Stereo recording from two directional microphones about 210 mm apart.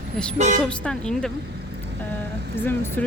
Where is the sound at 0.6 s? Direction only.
5° left (ahead or behind).